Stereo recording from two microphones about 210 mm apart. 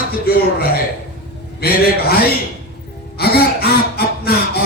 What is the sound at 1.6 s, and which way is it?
Speech, 50° left (ahead or behind).